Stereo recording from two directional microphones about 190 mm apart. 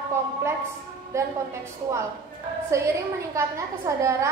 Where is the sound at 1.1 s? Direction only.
15° right (ahead or behind).